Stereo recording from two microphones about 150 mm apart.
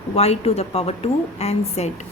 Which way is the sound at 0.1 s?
45° left (ahead or behind).